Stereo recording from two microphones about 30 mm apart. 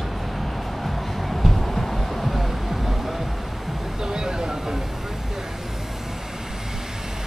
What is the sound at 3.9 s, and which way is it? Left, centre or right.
Vehicle, centre.